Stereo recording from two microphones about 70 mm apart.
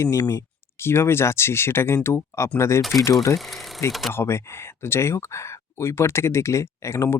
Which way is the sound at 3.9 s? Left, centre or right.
Centre.